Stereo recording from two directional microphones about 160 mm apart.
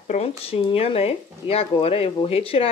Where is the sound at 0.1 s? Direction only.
40° left (ahead or behind).